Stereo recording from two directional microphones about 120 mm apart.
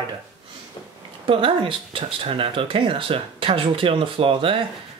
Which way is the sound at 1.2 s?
45° right (ahead or behind).